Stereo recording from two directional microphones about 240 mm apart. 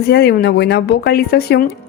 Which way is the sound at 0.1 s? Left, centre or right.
Left.